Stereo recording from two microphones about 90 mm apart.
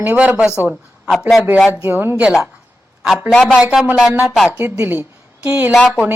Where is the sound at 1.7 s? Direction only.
25° right (ahead or behind).